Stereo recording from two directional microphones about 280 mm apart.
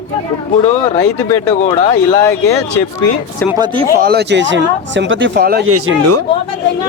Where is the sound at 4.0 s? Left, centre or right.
Right.